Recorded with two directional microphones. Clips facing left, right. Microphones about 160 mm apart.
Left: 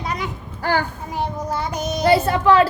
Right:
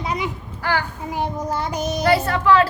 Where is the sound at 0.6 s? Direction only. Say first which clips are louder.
Left 2 dB; 30° left (ahead or behind).